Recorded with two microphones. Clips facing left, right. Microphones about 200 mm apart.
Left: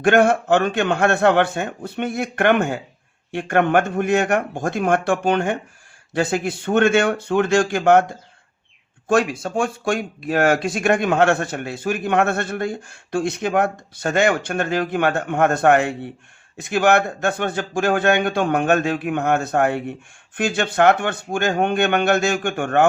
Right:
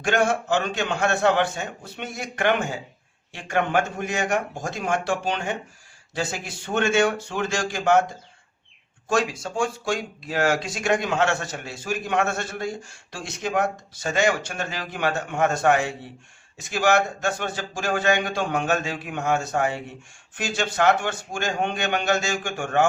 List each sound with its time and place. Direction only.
0.0 s speech: 60° left (ahead or behind)
9.0 s speech: 60° left (ahead or behind)